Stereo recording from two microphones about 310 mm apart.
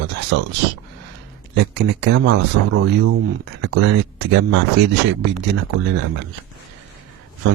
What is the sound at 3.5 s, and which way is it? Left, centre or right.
Speech, right.